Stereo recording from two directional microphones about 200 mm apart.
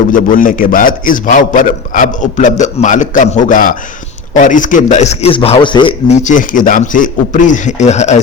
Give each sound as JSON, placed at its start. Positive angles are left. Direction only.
{"t": 0.1, "sound": "a man's voice", "side_deg": 45}
{"t": 6.2, "sound": "a man's voice", "side_deg": 40}